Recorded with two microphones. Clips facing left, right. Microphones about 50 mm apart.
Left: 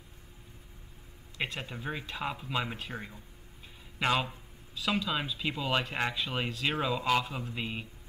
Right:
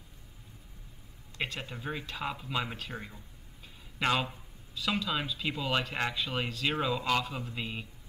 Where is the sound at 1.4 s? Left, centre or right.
Centre.